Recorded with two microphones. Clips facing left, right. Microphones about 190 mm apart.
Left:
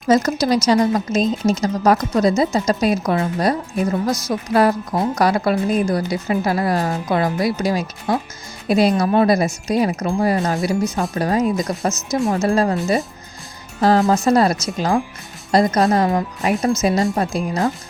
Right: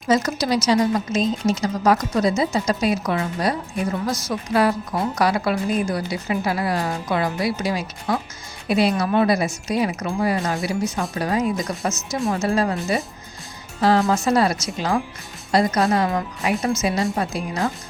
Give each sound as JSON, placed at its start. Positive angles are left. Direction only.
{"t": 0.1, "sound": "a woman's voice", "side_deg": 45}